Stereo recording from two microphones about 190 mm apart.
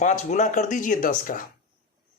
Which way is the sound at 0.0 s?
40° left (ahead or behind).